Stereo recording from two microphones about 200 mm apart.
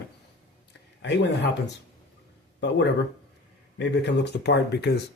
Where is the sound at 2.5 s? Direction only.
60° left (ahead or behind).